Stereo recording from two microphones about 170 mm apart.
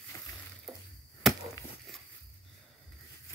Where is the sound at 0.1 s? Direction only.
15° left (ahead or behind).